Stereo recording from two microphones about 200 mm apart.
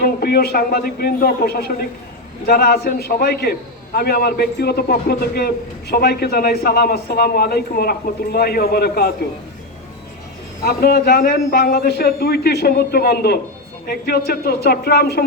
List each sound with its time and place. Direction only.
0.0 s a man's voice: 50° left (ahead or behind)
10.6 s a man's voice: 50° left (ahead or behind)